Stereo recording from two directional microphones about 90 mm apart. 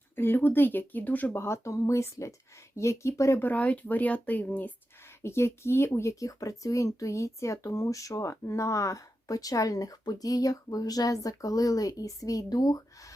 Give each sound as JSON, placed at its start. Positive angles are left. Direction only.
{"t": 0.2, "sound": "speech", "side_deg": 25}
{"t": 1.4, "sound": "speech", "side_deg": 30}
{"t": 3.4, "sound": "speech", "side_deg": 15}
{"t": 5.2, "sound": "speech", "side_deg": 30}